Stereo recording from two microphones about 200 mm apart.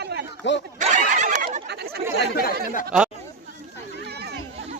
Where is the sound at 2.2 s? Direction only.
50° left (ahead or behind).